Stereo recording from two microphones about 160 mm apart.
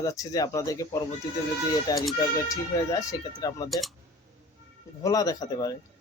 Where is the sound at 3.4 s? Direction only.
25° left (ahead or behind).